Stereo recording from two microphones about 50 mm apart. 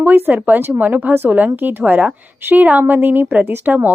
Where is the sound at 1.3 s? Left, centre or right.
Right.